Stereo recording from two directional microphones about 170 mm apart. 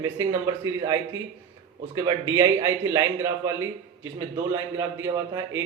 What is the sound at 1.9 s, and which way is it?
A man's voice, 20° right (ahead or behind).